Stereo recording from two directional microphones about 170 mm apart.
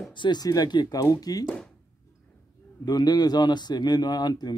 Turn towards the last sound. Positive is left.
turn(degrees=25)  # may be behind; listen again after turning